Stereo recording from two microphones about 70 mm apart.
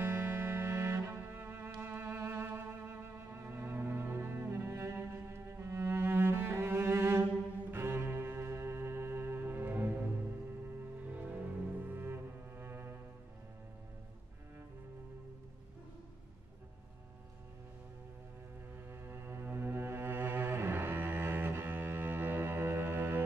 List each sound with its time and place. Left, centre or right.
0.0 s music: right
7.7 s cello: right
11.0 s music: right
18.9 s music: right